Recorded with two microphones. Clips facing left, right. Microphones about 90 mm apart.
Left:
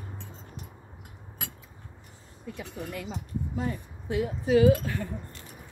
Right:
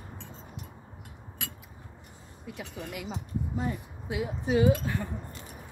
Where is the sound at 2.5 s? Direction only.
10° right (ahead or behind).